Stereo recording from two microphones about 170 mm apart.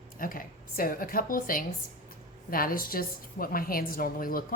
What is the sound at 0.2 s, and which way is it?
A woman's voice, 55° left (ahead or behind).